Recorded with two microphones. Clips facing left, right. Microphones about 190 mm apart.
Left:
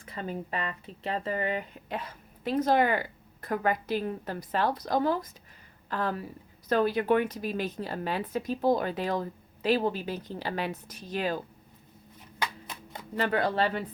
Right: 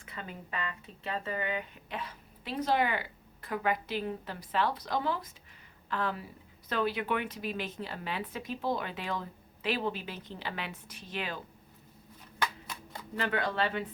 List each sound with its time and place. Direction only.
0.0 s a woman's voice: 35° left (ahead or behind)
12.4 s a sound: 20° left (ahead or behind)
13.1 s a woman's voice: 40° left (ahead or behind)